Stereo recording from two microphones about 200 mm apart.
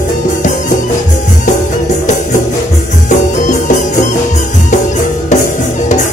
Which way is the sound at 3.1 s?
40° left (ahead or behind).